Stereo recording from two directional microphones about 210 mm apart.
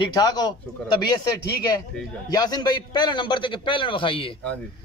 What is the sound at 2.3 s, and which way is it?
Speech, 20° left (ahead or behind).